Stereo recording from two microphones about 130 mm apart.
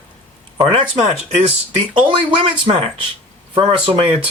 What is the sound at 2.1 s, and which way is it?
Speech, 45° right (ahead or behind).